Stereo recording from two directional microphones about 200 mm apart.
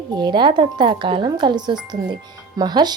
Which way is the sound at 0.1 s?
20° right (ahead or behind).